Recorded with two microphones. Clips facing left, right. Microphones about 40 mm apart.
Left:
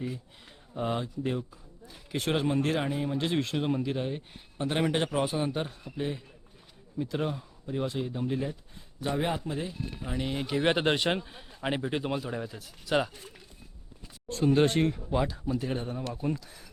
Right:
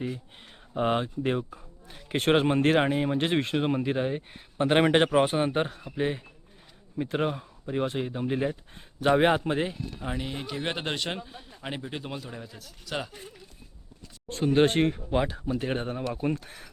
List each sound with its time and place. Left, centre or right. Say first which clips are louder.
0.7 s speech: right 5 dB; right
4.5 s speech: right 7 dB; right
9.0 s speech: right 8 dB; right
10.2 s speech: left 9 dB; centre
14.3 s speech: right 2 dB; right